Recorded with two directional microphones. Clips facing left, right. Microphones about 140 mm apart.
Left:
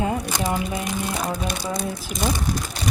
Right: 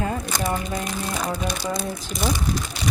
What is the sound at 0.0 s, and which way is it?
Crumpling, 15° left (ahead or behind).